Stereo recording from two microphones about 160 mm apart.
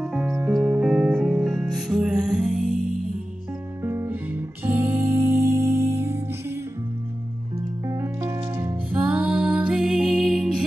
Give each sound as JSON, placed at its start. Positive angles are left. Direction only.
{"t": 0.0, "sound": "music", "side_deg": -5}
{"t": 3.8, "sound": "music", "side_deg": -15}
{"t": 7.8, "sound": "music", "side_deg": -15}